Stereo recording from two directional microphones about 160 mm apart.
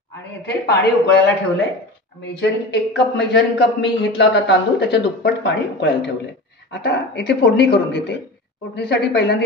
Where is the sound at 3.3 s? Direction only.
90° left.